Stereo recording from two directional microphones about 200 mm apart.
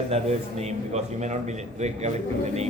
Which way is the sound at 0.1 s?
30° right (ahead or behind).